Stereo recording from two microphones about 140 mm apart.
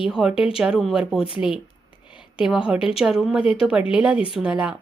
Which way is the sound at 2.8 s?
40° left (ahead or behind).